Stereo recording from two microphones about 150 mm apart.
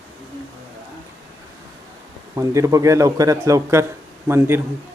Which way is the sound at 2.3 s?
20° right (ahead or behind).